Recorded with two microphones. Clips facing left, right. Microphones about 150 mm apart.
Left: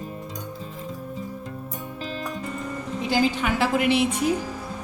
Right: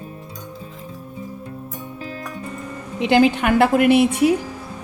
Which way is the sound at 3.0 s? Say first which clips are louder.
Right 8 dB; 65° right (ahead or behind).